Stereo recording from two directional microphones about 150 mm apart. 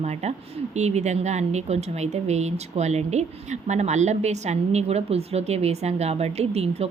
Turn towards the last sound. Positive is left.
turn(degrees=-45)  # may be behind; listen again after turning